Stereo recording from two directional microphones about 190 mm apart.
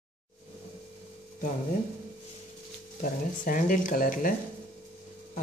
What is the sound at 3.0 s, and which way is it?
Speech, 45° left (ahead or behind).